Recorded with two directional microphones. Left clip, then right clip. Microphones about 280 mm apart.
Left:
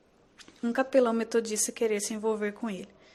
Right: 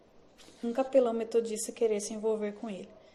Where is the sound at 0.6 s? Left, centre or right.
Left.